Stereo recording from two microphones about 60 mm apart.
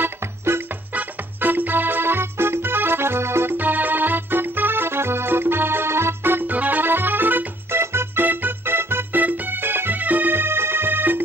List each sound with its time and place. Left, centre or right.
0.0 s music: right
3.5 s music: right
7.8 s organ: right